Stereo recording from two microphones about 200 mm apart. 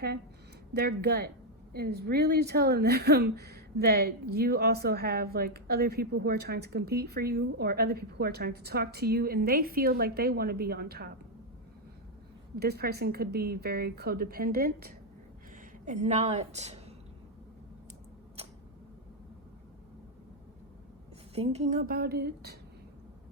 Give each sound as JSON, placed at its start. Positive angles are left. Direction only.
{"t": 0.7, "sound": "speech", "side_deg": -55}
{"t": 12.5, "sound": "speech", "side_deg": -50}
{"t": 15.9, "sound": "a woman's voice", "side_deg": -35}
{"t": 21.3, "sound": "speech", "side_deg": -30}